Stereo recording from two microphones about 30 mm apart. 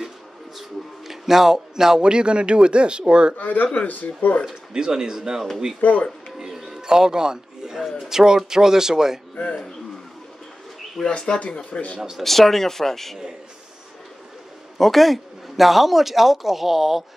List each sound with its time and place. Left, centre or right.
0.6 s a sound: centre
2.0 s speech: right
3.3 s speech: left
4.7 s speech: right
5.8 s speech: left
6.3 s a sound: centre
6.9 s a man's voice: right
8.0 s a man's voice: centre
11.1 s speech: left
12.2 s speech: centre
14.8 s a man's voice: centre